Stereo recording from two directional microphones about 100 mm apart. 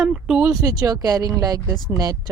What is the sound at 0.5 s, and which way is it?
Speech, 35° right (ahead or behind).